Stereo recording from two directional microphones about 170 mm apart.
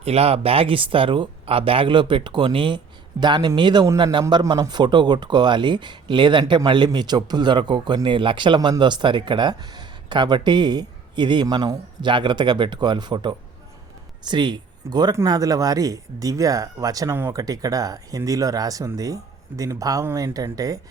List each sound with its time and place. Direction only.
0.0 s speech: 35° right (ahead or behind); by 20.8 s 20° right (ahead or behind)